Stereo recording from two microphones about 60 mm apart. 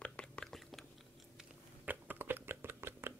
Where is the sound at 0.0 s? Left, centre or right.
Centre.